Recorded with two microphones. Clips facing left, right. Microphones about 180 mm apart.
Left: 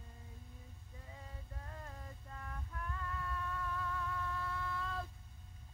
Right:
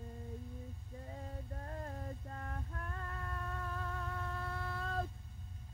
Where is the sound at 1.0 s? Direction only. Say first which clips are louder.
Right 7 dB; 40° right (ahead or behind).